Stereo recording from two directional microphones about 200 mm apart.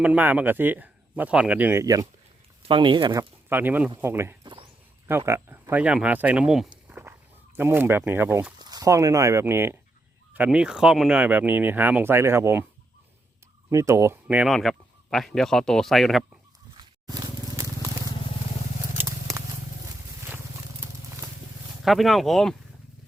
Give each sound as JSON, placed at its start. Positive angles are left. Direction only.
{"t": 0.0, "sound": "speech", "side_deg": -5}
{"t": 3.5, "sound": "speech", "side_deg": -10}
{"t": 6.8, "sound": "a sound", "side_deg": -10}
{"t": 7.5, "sound": "speech", "side_deg": -10}
{"t": 13.7, "sound": "speech", "side_deg": -15}
{"t": 16.7, "sound": "a sound", "side_deg": -20}
{"t": 18.9, "sound": "scissors", "side_deg": -15}
{"t": 21.8, "sound": "speech", "side_deg": 0}